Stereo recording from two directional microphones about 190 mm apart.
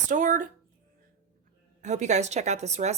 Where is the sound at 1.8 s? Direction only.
40° right (ahead or behind).